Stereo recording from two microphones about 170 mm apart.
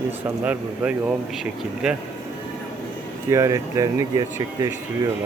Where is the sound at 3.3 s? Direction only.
20° right (ahead or behind).